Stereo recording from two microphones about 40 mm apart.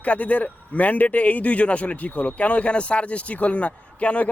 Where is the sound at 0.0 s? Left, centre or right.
Left.